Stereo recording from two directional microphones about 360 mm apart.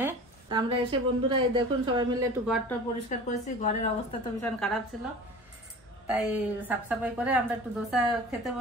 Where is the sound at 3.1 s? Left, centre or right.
Left.